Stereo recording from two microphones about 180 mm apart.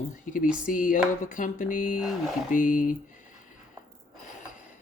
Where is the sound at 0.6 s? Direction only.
50° left (ahead or behind).